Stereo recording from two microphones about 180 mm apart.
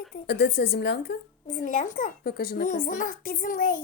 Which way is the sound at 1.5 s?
45° left (ahead or behind).